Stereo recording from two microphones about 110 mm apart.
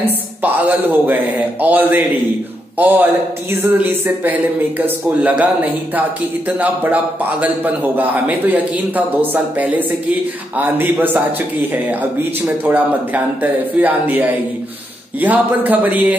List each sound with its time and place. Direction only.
0.0 s a man's voice: 15° right (ahead or behind)